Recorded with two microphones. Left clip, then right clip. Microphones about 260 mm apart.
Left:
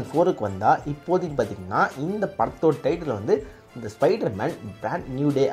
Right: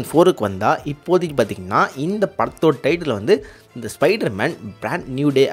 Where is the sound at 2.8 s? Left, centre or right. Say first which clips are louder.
Right 6 dB; right.